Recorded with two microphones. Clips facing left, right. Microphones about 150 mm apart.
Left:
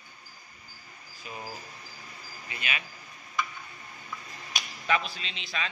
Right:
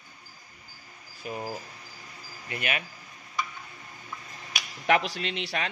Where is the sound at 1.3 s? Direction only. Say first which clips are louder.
Right 7 dB; 50° right (ahead or behind).